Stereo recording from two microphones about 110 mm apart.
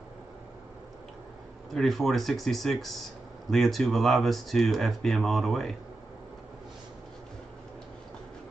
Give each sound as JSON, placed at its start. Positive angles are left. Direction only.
{"t": 1.7, "sound": "speech", "side_deg": 0}